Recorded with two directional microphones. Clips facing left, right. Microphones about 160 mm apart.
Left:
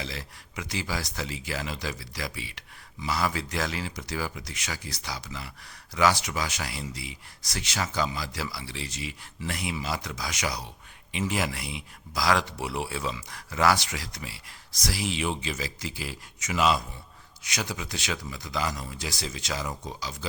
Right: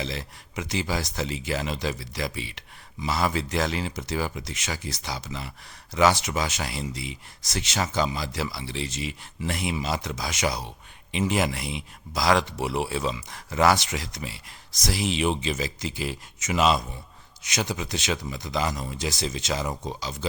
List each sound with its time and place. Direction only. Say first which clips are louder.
0.0 s speech: right 5 dB; 25° right (ahead or behind)